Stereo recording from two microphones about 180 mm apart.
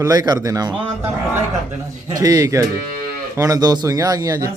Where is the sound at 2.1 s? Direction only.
20° right (ahead or behind).